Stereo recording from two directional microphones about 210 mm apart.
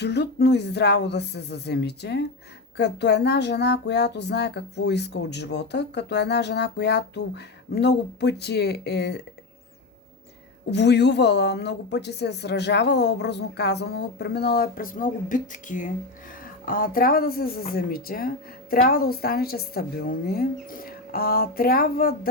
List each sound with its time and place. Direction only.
0.0 s speech: 55° left (ahead or behind)
10.7 s speech: 55° left (ahead or behind)